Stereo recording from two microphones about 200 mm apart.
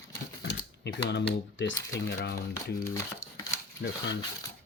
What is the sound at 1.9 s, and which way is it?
Speech, 60° left (ahead or behind).